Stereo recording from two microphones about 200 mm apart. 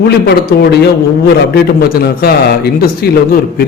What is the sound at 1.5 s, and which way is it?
A man's voice, 50° left (ahead or behind).